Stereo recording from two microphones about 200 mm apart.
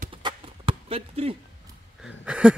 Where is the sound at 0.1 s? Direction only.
25° right (ahead or behind).